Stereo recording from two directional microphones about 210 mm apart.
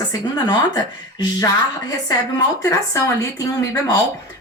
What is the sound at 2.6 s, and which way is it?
Speech, 15° left (ahead or behind).